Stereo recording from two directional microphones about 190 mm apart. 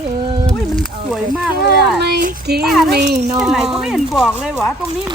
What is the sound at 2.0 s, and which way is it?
Speech, 55° right (ahead or behind).